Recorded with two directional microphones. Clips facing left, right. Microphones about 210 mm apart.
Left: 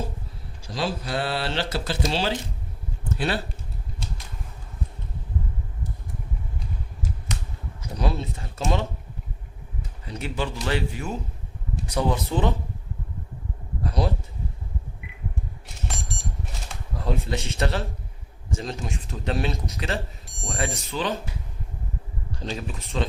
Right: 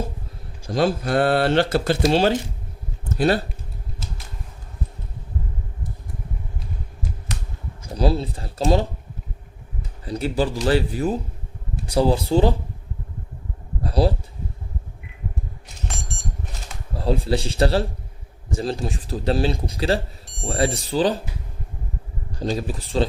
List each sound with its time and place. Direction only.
0.7 s speech: 50° right (ahead or behind)
7.9 s speech: 35° right (ahead or behind)
10.1 s speech: 35° right (ahead or behind)
13.8 s a sound: 30° right (ahead or behind)
17.0 s speech: 35° right (ahead or behind)
22.4 s speech: 35° right (ahead or behind)